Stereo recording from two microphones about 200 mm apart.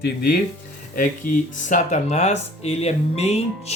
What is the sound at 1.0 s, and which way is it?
Speech, 40° left (ahead or behind).